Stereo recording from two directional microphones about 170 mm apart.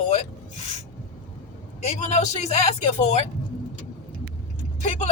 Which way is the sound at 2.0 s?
40° left (ahead or behind).